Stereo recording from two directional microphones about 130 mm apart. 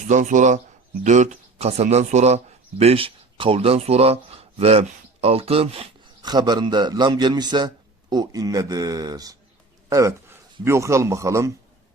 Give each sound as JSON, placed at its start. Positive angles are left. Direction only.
{"t": 0.1, "sound": "a man's voice", "side_deg": -75}
{"t": 6.2, "sound": "a man's voice", "side_deg": -35}